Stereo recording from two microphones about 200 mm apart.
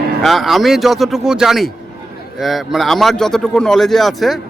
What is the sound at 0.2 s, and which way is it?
Speech, centre (ahead or behind).